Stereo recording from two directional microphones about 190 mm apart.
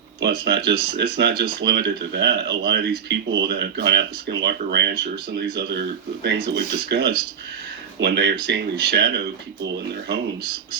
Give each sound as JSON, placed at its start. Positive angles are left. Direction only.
{"t": 0.2, "sound": "speech", "side_deg": -60}